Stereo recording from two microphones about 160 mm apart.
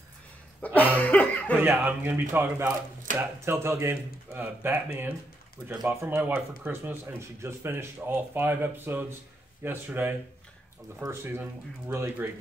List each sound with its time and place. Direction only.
0.7 s cough: 10° left (ahead or behind)
1.6 s speech: 10° right (ahead or behind)